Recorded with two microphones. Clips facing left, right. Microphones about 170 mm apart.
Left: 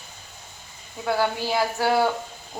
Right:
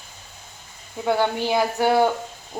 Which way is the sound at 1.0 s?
20° right (ahead or behind).